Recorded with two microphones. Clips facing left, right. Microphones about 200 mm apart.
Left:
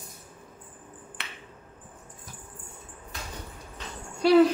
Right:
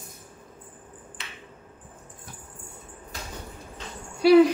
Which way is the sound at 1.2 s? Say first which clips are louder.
Left 1 dB; 65° left (ahead or behind).